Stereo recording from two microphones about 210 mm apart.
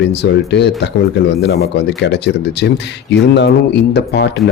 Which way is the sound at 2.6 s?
55° left (ahead or behind).